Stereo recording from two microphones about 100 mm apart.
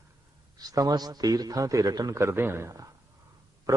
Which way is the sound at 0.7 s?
40° right (ahead or behind).